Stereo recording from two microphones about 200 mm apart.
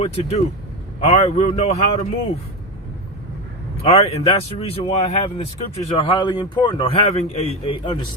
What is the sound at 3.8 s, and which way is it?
A man's voice, 30° left (ahead or behind).